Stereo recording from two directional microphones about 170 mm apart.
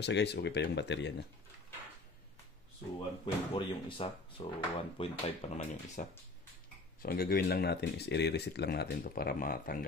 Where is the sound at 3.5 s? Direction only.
30° left (ahead or behind); by 6.0 s 45° left (ahead or behind).